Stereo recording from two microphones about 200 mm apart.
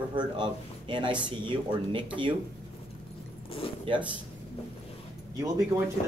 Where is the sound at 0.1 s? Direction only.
25° right (ahead or behind).